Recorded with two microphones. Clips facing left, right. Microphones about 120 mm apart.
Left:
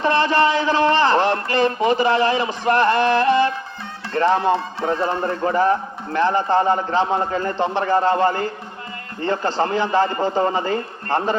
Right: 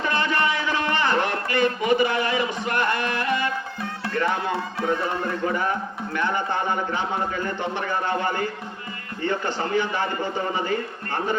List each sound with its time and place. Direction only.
0.0 s a sound: 30° left (ahead or behind)
2.6 s music: 30° left (ahead or behind)
4.1 s a man's voice: 30° left (ahead or behind)